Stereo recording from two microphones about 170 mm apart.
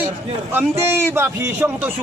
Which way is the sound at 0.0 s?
10° right (ahead or behind).